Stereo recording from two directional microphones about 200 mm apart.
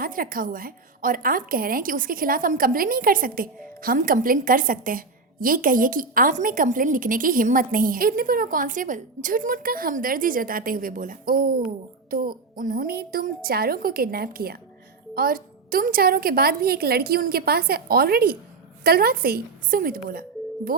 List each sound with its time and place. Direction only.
0.0 s a woman's voice: 45° right (ahead or behind)